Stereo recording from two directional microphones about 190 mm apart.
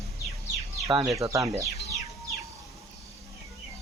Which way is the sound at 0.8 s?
15° right (ahead or behind).